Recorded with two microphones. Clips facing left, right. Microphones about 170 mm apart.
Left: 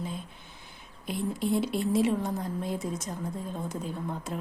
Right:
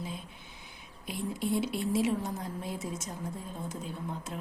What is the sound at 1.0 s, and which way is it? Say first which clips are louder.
A woman's voice: left 4 dB; centre (ahead or behind).